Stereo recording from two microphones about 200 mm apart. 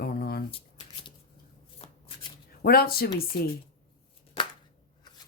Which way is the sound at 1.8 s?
30° left (ahead or behind).